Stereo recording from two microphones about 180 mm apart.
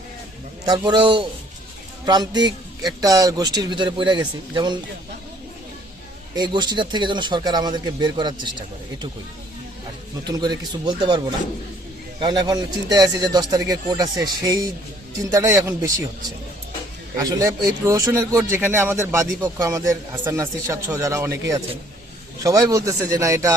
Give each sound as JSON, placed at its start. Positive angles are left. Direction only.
{"t": 0.6, "sound": "a man's voice", "side_deg": -25}
{"t": 6.3, "sound": "a man's voice", "side_deg": -25}
{"t": 10.2, "sound": "a man's voice", "side_deg": -25}
{"t": 12.2, "sound": "a man's voice", "side_deg": -25}
{"t": 17.2, "sound": "a man's voice", "side_deg": -20}